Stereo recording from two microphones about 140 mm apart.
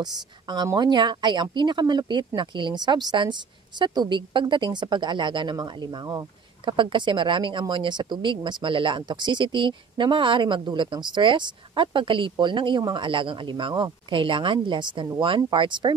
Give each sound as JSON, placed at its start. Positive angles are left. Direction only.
{"t": 0.0, "sound": "speech", "side_deg": -30}